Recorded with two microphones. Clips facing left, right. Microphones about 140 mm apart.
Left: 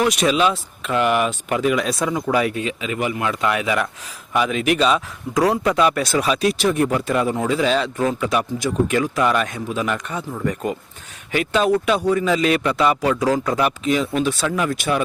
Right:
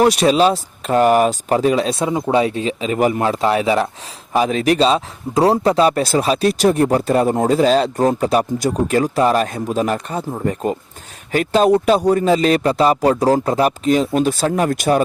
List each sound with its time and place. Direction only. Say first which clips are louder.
0.0 s speech: right 5 dB; 35° right (ahead or behind)